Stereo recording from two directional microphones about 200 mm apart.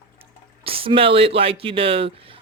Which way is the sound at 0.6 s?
25° right (ahead or behind).